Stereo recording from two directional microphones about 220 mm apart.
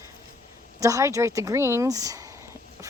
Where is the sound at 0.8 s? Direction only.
15° right (ahead or behind).